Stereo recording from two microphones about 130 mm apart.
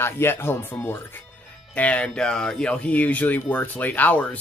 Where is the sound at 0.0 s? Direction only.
20° left (ahead or behind).